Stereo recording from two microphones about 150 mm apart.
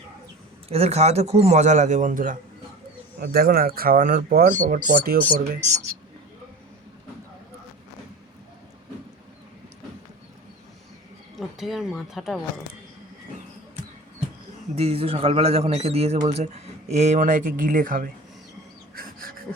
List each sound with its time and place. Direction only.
0.7 s a man's voice: 45° right (ahead or behind); by 2.4 s 60° right (ahead or behind)
3.2 s speech: 85° right; by 5.1 s 60° right (ahead or behind)
5.5 s a man's voice: 50° right (ahead or behind)
11.3 s speech: centre (ahead or behind)
14.8 s a man's voice: 40° right (ahead or behind); by 18.1 s 65° right (ahead or behind)
18.9 s pant: 75° right (ahead or behind)